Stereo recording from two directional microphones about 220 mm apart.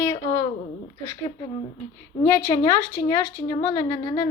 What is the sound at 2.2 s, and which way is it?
Speech, 10° left (ahead or behind).